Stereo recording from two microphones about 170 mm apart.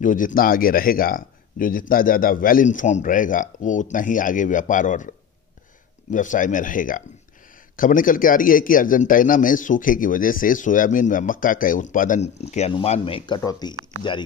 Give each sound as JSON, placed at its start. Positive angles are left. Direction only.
{"t": 0.0, "sound": "speech", "side_deg": 50}
{"t": 13.4, "sound": "speech", "side_deg": 20}